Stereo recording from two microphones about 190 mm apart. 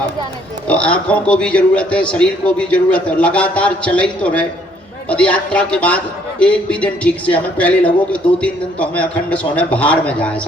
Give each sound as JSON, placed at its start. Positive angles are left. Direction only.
{"t": 0.7, "sound": "a man's voice", "side_deg": 5}